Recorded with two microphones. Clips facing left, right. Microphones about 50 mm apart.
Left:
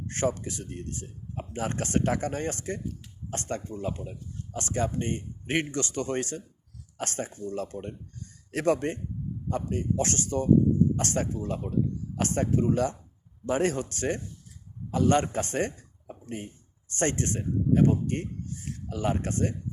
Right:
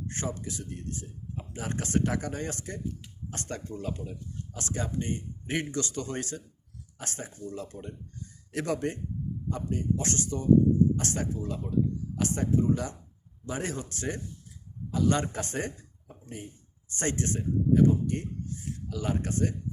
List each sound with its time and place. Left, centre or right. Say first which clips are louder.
0.1 s speech: left 9 dB; left
3.6 s speech: left 2 dB; left
4.5 s a man's voice: left 4 dB; left